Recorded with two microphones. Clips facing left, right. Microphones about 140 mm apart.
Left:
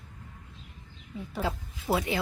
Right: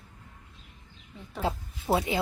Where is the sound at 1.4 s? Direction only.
25° right (ahead or behind).